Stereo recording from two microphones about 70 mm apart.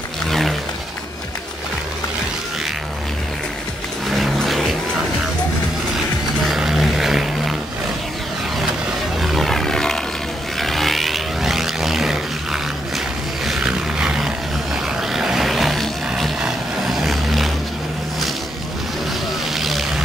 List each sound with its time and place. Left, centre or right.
0.3 s a sound: centre
4.1 s vehicle: centre
6.5 s vehicle: centre
9.2 s vehicle: centre
13.7 s a sound: centre
15.0 s vehicle: centre
19.5 s vehicle: centre